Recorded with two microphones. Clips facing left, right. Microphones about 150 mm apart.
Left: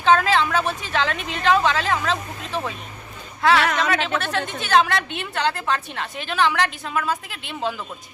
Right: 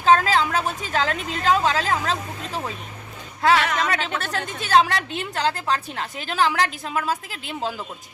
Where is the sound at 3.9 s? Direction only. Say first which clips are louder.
Left 3 dB; 40° right (ahead or behind).